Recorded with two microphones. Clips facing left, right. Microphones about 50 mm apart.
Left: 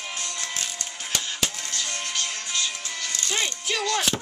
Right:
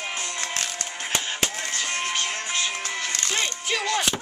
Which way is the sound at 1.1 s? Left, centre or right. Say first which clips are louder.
Right 2 dB; right.